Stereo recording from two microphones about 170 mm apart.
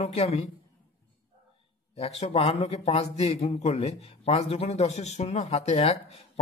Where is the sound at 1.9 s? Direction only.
35° left (ahead or behind).